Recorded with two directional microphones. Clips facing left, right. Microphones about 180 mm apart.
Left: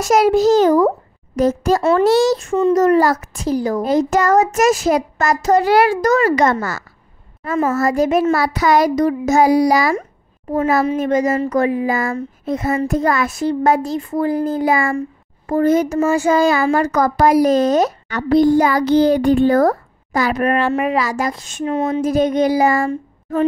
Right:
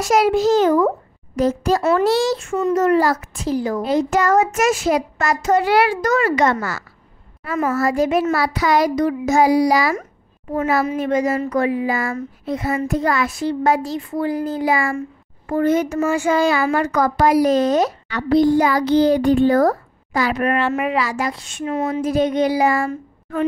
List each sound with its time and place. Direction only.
0.0 s a child's voice: 40° left (ahead or behind)
1.8 s speech: 30° left (ahead or behind)
2.0 s a child's voice: 45° left (ahead or behind)
15.0 s a child's voice: 40° left (ahead or behind)
22.0 s speech: 45° left (ahead or behind)